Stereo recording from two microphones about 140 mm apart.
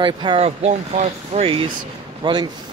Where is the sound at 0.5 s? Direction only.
50° right (ahead or behind).